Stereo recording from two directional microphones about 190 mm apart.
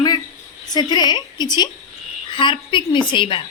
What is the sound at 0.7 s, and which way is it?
A woman's voice, 20° left (ahead or behind).